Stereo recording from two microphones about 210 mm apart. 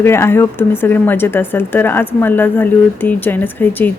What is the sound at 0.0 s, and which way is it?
Speech, 10° left (ahead or behind).